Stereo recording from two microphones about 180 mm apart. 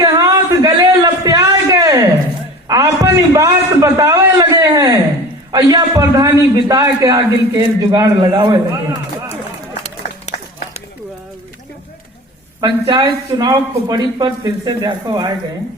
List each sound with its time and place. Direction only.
0.0 s a sound: 20° right (ahead or behind)
5.5 s a man's voice: 20° right (ahead or behind)
12.5 s a man's voice: 20° right (ahead or behind)